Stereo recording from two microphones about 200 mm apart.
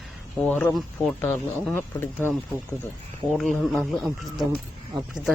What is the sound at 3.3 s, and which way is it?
Speech, centre (ahead or behind).